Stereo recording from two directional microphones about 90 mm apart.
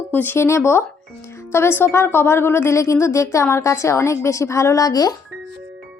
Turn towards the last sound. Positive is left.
turn(degrees=45)  # may be behind; listen again after turning